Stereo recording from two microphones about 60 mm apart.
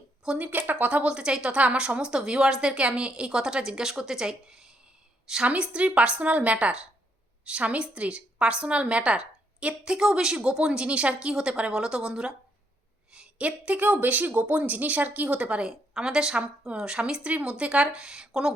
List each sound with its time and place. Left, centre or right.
0.3 s speech: right; by 4.7 s centre
5.5 s a woman's voice: centre